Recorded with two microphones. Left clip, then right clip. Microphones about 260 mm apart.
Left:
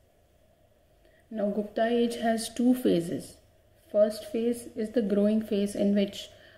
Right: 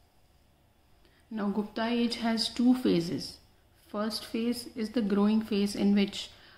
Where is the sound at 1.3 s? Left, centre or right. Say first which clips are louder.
Left 5 dB; centre.